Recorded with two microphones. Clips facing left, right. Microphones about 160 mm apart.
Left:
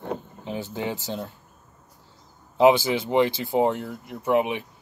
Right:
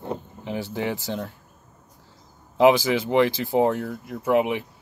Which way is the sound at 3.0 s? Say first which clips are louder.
Right 1 dB; 25° left (ahead or behind).